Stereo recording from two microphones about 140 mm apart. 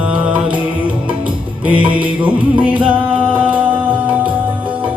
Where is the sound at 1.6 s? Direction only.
10° right (ahead or behind).